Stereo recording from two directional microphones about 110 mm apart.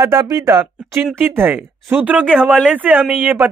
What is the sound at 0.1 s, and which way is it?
Speech, 30° right (ahead or behind).